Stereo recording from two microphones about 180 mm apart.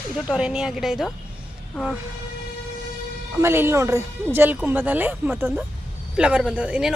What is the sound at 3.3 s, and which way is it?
A woman's voice, 10° right (ahead or behind).